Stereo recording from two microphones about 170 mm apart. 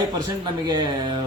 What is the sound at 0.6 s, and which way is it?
Speech, 25° right (ahead or behind).